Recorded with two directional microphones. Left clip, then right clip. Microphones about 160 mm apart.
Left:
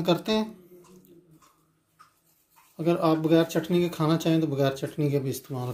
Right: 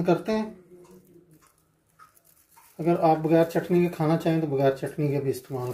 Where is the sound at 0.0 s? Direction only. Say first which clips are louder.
Right 1 dB; 55° left (ahead or behind).